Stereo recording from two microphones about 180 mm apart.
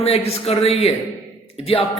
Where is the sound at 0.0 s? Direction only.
35° left (ahead or behind).